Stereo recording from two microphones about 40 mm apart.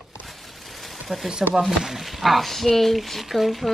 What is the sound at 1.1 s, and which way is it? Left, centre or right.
Speech, centre.